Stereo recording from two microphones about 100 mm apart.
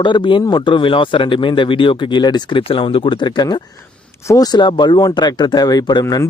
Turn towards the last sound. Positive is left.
turn(degrees=40)  # may be behind; listen again after turning